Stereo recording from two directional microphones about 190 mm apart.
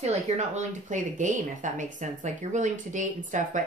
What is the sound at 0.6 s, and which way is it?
A woman's voice, 40° right (ahead or behind).